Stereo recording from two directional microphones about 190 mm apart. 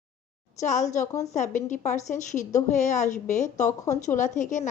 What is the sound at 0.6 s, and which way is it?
A woman's voice, 40° left (ahead or behind).